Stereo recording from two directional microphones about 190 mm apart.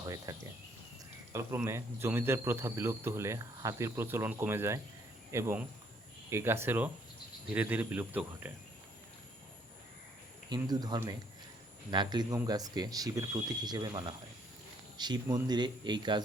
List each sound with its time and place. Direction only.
0.0 s speech: 15° right (ahead or behind)
10.5 s speech: 20° right (ahead or behind)